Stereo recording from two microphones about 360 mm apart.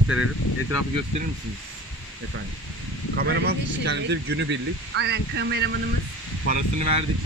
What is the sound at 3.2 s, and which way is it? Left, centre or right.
Speech, right.